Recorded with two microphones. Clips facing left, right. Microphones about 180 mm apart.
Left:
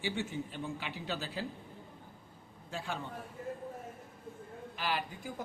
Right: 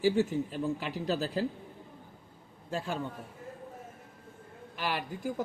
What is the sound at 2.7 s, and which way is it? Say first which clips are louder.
Speech: right 5 dB; 40° right (ahead or behind).